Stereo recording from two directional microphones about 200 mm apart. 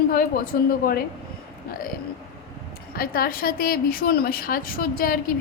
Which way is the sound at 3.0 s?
50° left (ahead or behind).